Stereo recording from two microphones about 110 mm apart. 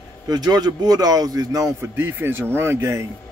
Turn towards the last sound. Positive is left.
turn(degrees=-25)  # may be behind; listen again after turning